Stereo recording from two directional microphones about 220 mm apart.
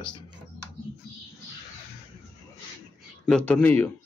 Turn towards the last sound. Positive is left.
turn(degrees=10)  # may be behind; listen again after turning